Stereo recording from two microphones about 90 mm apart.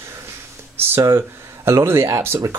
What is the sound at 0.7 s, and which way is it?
Speech, 25° right (ahead or behind).